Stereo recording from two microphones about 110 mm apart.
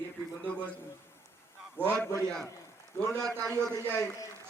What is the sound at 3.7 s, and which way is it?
Speech, 30° left (ahead or behind).